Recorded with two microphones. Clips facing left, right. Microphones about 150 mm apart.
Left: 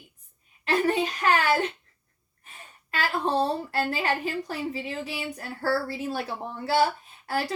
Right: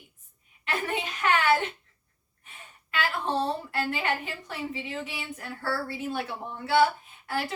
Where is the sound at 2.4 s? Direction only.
40° left (ahead or behind).